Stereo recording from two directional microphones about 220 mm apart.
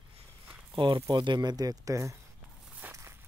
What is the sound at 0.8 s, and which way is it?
Speech, 20° right (ahead or behind).